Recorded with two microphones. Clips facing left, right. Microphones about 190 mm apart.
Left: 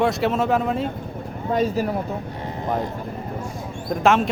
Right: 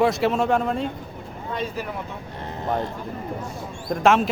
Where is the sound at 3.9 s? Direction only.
Centre (ahead or behind).